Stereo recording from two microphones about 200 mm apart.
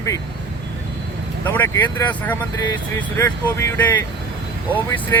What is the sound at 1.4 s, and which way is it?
Speech, 10° left (ahead or behind).